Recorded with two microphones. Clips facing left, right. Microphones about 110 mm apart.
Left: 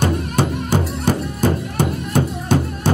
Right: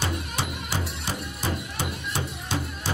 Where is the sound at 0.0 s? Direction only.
50° left (ahead or behind).